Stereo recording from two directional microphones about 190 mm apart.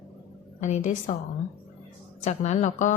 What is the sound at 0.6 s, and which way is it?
Speech, 40° left (ahead or behind).